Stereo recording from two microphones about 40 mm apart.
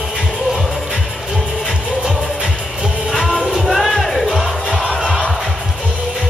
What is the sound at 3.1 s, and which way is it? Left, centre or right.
Music, centre.